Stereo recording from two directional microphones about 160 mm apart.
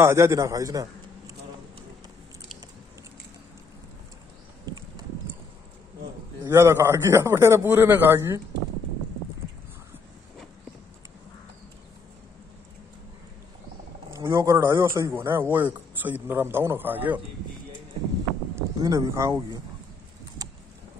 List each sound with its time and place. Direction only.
0.0 s a man's voice: 15° right (ahead or behind)
6.4 s a man's voice: 15° right (ahead or behind)
14.1 s a man's voice: 20° right (ahead or behind)
18.6 s speech: 20° right (ahead or behind)